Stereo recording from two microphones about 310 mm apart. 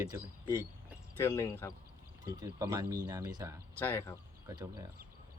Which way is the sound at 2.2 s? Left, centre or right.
Centre.